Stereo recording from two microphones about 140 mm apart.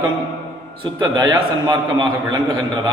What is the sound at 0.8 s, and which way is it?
A man's voice, 30° right (ahead or behind).